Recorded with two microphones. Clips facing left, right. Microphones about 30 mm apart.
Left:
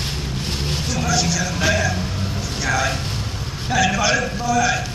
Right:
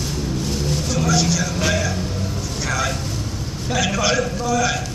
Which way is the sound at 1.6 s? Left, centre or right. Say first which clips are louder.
Left 4 dB; centre.